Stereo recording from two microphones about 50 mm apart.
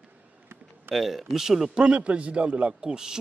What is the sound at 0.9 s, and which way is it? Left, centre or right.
Speech, centre.